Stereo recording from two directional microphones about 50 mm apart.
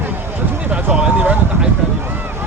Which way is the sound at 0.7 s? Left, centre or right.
Centre.